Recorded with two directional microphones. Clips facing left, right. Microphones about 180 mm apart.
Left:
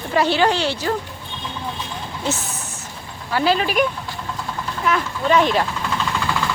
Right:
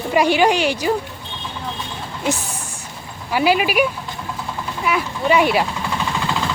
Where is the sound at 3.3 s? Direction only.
10° right (ahead or behind).